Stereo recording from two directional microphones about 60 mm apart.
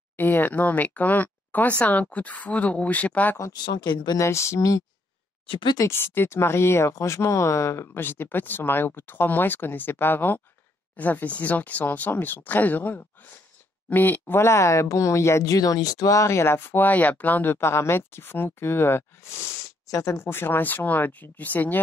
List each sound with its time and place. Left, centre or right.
0.1 s speech: left
4.2 s speech: left
5.9 s speech: left
8.0 s speech: left
14.3 s speech: left
15.4 s speech: left
16.3 s speech: left
17.6 s speech: left
19.9 s speech: left
20.2 s speech: left